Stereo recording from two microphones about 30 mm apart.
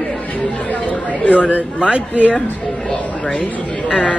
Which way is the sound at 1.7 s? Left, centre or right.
Right.